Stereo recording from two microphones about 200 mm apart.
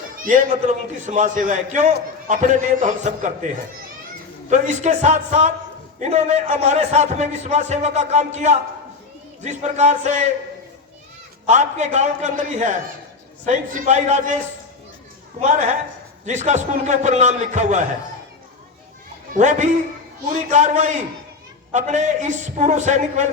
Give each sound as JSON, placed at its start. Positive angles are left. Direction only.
{"t": 0.2, "sound": "a man's voice", "side_deg": -40}
{"t": 11.4, "sound": "a man's voice", "side_deg": -35}
{"t": 15.4, "sound": "a man's voice", "side_deg": -35}
{"t": 19.3, "sound": "a man's voice", "side_deg": -35}